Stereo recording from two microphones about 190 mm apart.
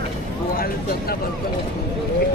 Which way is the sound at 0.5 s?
50° left (ahead or behind).